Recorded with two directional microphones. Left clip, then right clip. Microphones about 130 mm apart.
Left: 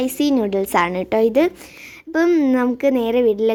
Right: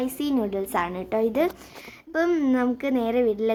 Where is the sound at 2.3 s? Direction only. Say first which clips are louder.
Left 8 dB; 20° left (ahead or behind).